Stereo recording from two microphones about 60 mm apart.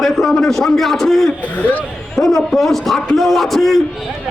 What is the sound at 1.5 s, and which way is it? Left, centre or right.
Speech, left.